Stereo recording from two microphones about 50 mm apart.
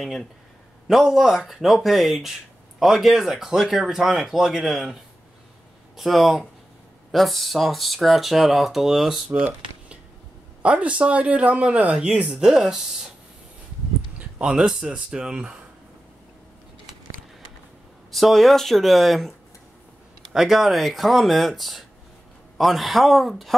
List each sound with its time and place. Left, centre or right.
0.0 s speech: centre
0.8 s speech: centre
5.9 s speech: centre
10.6 s speech: right
14.4 s speech: centre
18.1 s speech: centre
20.3 s speech: centre